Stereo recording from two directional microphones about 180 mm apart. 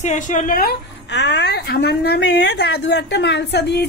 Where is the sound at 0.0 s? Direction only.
40° left (ahead or behind).